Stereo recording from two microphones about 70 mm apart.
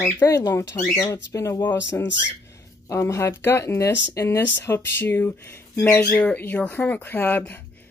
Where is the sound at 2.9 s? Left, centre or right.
Left.